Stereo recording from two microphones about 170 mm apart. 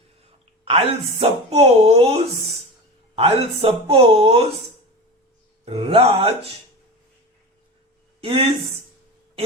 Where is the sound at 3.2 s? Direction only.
35° right (ahead or behind).